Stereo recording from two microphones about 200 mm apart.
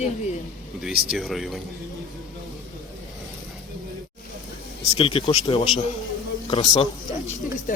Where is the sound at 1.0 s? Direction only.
Centre (ahead or behind).